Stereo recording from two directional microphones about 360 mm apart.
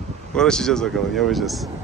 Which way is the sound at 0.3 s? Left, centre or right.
Centre.